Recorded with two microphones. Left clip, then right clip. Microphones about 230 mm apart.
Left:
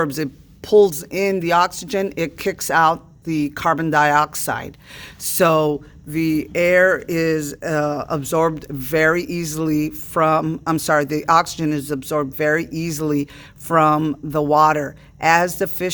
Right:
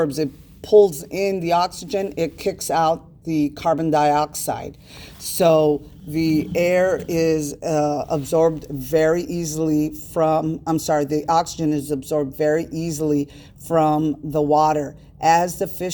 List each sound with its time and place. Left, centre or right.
0.0 s speech: left